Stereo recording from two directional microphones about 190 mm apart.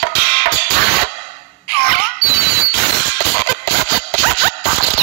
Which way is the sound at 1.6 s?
60° right (ahead or behind).